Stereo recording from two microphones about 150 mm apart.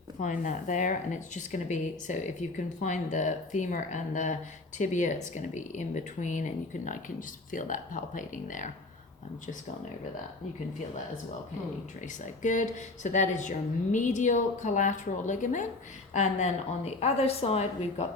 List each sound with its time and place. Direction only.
0.2 s speech: 55° left (ahead or behind)
12.2 s a woman's voice: 55° left (ahead or behind)